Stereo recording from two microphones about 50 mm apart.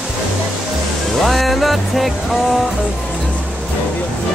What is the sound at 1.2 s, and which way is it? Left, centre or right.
Music, centre.